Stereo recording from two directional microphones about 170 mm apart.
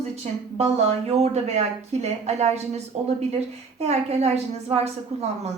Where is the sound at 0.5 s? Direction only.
35° right (ahead or behind).